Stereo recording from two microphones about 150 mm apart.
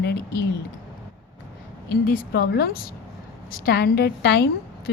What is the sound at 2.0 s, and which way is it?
A woman's voice, 90° left.